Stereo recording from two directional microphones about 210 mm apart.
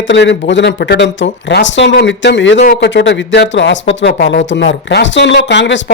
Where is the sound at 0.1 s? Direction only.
60° left (ahead or behind).